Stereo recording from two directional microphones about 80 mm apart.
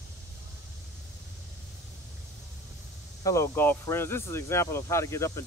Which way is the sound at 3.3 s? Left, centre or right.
Left.